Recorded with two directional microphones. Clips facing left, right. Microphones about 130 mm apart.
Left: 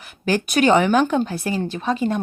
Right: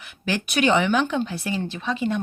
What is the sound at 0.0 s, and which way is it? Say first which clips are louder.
Speech: left 5 dB; 40° left (ahead or behind).